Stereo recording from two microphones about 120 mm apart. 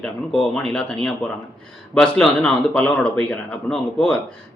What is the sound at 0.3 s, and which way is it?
A man's voice, 5° left (ahead or behind).